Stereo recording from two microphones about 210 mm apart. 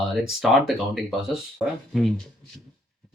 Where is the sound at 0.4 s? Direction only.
5° right (ahead or behind).